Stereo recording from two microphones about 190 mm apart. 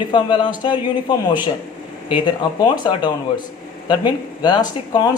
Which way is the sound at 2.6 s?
25° left (ahead or behind).